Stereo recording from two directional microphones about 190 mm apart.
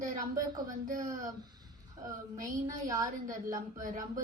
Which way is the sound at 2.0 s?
20° right (ahead or behind).